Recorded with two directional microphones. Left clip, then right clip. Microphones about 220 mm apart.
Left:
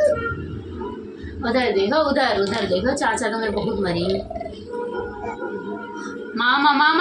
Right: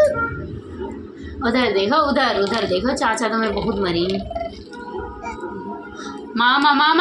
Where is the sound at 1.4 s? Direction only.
15° right (ahead or behind).